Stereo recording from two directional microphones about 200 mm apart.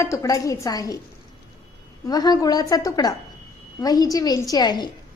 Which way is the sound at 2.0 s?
20° left (ahead or behind).